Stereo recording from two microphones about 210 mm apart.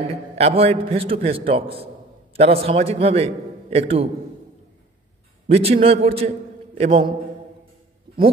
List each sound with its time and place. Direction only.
0.1 s a man's voice: 30° right (ahead or behind)
5.5 s a man's voice: 30° right (ahead or behind)